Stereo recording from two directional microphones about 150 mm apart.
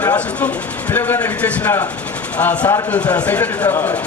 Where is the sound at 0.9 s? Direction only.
15° left (ahead or behind).